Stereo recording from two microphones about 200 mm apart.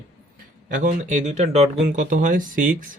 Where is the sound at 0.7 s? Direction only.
40° right (ahead or behind).